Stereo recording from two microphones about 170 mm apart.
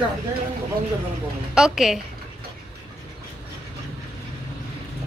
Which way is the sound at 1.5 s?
5° right (ahead or behind).